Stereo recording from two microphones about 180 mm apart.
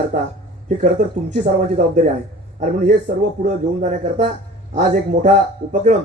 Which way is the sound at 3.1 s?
45° right (ahead or behind).